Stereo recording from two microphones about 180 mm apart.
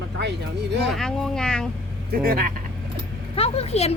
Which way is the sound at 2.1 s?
55° right (ahead or behind).